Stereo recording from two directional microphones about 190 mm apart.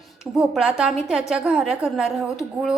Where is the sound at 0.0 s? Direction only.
Centre (ahead or behind).